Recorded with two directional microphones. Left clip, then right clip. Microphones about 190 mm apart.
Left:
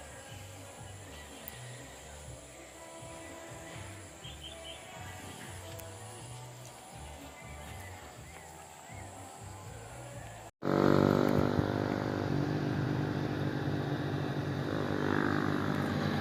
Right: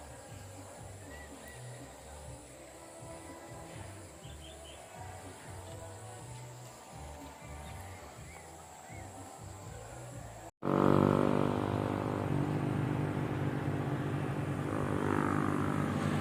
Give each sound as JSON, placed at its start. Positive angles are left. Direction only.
{"t": 10.6, "sound": "vehicle", "side_deg": 50}